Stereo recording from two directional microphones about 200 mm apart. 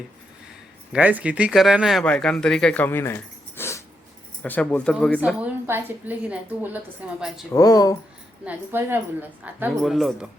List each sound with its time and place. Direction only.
0.9 s speech: 5° right (ahead or behind); by 3.2 s 10° left (ahead or behind)
3.6 s dog: 15° left (ahead or behind)
4.4 s speech: 10° left (ahead or behind)
5.6 s a woman's voice: 10° right (ahead or behind)
7.5 s speech: 20° left (ahead or behind)
8.4 s a woman's voice: 10° right (ahead or behind)